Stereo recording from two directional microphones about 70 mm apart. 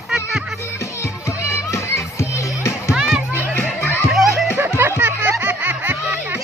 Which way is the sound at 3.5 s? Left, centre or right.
Left.